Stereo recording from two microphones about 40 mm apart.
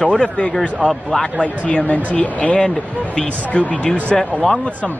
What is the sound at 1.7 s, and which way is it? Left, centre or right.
A man's voice, left.